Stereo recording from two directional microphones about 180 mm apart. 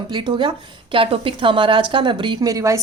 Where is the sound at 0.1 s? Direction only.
25° right (ahead or behind).